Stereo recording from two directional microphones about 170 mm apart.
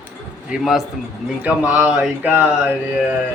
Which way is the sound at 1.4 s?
10° right (ahead or behind).